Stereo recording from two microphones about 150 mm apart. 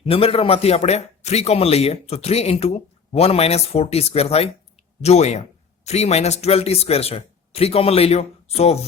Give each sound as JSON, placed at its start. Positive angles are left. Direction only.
{"t": 0.0, "sound": "a man's voice", "side_deg": 40}